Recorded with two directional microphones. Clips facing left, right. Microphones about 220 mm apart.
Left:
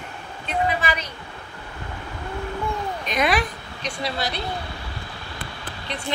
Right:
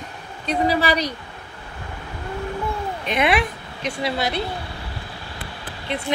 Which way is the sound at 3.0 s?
25° right (ahead or behind).